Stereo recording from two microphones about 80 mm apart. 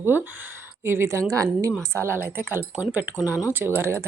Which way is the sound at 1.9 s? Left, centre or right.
Right.